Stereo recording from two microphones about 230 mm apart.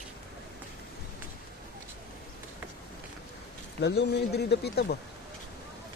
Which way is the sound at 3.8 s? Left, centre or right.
Left.